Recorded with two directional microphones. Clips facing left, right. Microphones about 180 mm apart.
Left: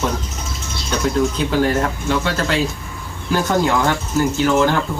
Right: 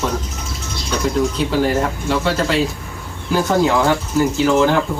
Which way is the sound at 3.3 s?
5° right (ahead or behind).